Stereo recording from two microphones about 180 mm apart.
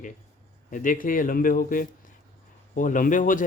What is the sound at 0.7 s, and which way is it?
A man's voice, 50° left (ahead or behind).